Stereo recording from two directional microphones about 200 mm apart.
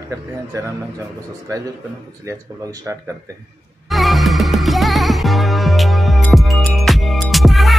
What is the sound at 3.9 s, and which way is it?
Music, centre (ahead or behind).